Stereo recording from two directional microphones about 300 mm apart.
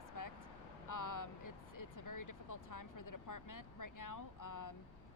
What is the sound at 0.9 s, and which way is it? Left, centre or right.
Speech, left.